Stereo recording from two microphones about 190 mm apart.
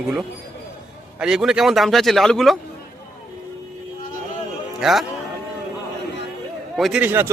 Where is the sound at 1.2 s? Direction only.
5° right (ahead or behind).